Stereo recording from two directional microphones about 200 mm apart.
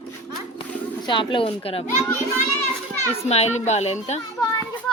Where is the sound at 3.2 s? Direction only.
35° left (ahead or behind).